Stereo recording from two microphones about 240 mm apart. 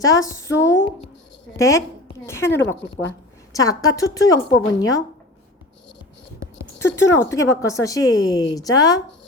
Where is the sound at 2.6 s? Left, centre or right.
Left.